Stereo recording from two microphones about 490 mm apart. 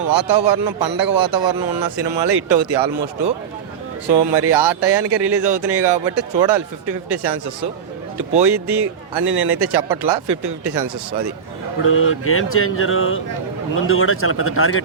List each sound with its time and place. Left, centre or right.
0.1 s speech: right
11.8 s speech: left